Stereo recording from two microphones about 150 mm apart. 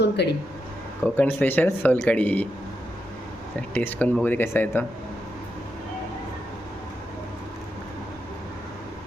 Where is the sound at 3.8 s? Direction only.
10° left (ahead or behind).